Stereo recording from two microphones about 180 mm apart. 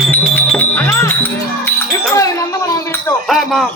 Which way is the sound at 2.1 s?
15° left (ahead or behind).